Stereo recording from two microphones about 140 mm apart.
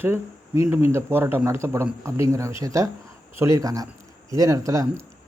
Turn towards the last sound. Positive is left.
turn(degrees=-25)  # may be behind; listen again after turning